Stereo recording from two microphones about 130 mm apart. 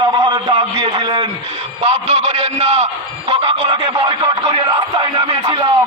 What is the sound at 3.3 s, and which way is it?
Music, 45° right (ahead or behind).